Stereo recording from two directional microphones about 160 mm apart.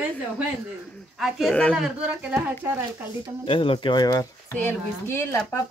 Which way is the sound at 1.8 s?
5° right (ahead or behind).